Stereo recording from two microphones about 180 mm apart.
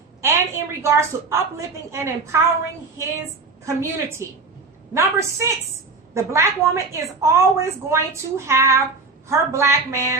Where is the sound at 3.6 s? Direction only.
15° right (ahead or behind).